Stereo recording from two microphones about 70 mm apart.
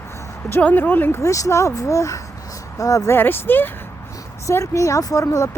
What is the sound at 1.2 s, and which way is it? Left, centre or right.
Speech, left.